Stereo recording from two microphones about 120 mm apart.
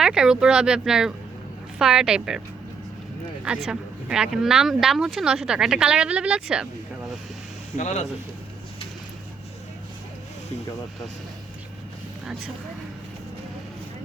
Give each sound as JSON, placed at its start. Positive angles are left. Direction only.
{"t": 0.0, "sound": "speech", "side_deg": -5}
{"t": 3.4, "sound": "speech", "side_deg": -5}
{"t": 7.8, "sound": "speech", "side_deg": 75}